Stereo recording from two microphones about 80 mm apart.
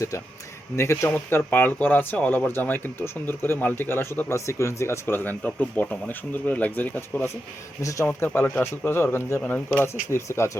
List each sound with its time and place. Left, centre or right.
0.8 s speech: left
7.8 s speech: left
8.5 s speech: left